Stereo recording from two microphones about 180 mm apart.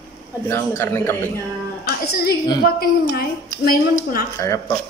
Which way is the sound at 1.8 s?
60° left (ahead or behind).